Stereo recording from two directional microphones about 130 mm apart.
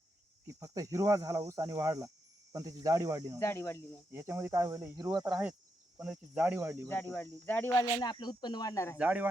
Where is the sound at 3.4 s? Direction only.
20° left (ahead or behind).